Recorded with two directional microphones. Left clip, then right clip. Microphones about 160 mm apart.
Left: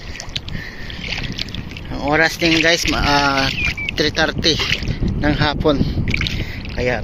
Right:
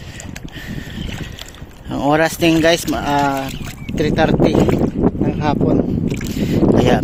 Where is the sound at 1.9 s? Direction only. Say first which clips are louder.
Right 1 dB; 40° right (ahead or behind).